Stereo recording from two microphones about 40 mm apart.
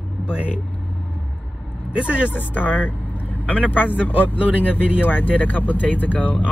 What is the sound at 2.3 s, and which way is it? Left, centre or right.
Speech, left.